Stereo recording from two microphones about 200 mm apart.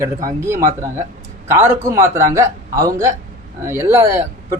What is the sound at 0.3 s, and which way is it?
A man's voice, 15° right (ahead or behind).